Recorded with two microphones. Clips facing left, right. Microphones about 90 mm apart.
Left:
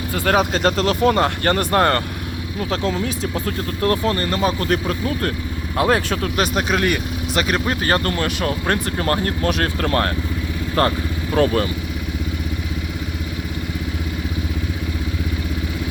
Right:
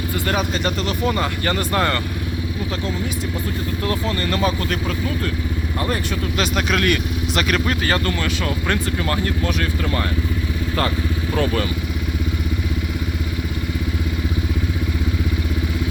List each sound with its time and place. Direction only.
0.3 s speech: 90° left; by 2.0 s 50° left (ahead or behind)
3.8 s speech: 45° left (ahead or behind)
5.7 s speech: 90° left
6.3 s speech: 40° left (ahead or behind)
7.7 s speech: 40° left (ahead or behind); by 10.1 s 60° left (ahead or behind)
11.3 s speech: 35° left (ahead or behind)